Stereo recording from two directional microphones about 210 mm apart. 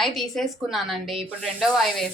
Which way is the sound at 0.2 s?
Centre (ahead or behind).